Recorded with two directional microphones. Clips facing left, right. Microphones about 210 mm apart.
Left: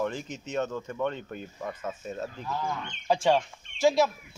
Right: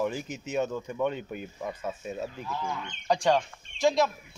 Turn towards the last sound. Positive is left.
turn(degrees=5)  # may be behind; listen again after turning